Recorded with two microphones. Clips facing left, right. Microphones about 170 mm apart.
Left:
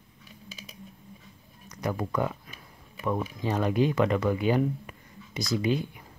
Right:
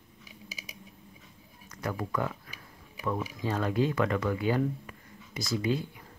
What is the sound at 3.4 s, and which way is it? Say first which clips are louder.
Speech: left 3 dB; 15° left (ahead or behind).